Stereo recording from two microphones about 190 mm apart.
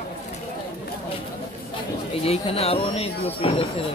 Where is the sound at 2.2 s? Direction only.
30° left (ahead or behind).